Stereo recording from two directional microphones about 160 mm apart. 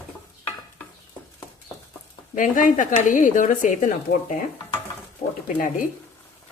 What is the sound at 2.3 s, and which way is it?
Speech, 55° left (ahead or behind).